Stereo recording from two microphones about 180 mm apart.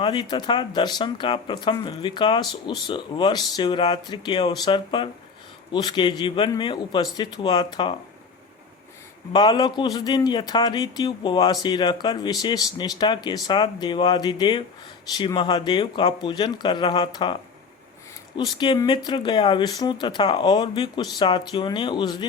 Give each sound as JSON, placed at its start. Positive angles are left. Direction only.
{"t": 0.0, "sound": "a man's voice", "side_deg": 25}
{"t": 9.3, "sound": "a man's voice", "side_deg": 25}
{"t": 18.3, "sound": "a man's voice", "side_deg": 25}